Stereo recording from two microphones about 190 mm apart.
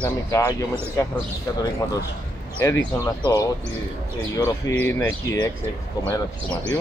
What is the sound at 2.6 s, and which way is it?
Speech, 20° left (ahead or behind).